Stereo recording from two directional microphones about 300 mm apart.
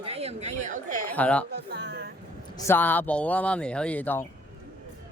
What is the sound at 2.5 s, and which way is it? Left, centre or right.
Speech, centre.